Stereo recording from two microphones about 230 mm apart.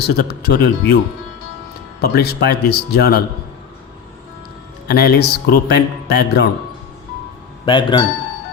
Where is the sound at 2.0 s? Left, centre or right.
Left.